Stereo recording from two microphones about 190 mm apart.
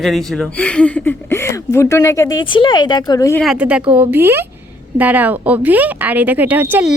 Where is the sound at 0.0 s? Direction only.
Centre (ahead or behind).